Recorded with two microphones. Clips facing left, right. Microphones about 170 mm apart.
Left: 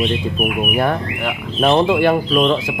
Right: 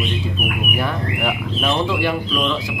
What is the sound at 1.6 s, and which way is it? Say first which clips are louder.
Speech: left 8 dB; 50° left (ahead or behind).